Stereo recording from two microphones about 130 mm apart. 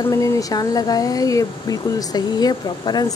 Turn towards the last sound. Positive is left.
turn(degrees=30)  # may be behind; listen again after turning